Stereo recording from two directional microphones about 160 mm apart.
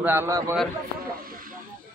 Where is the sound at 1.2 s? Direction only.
60° right (ahead or behind).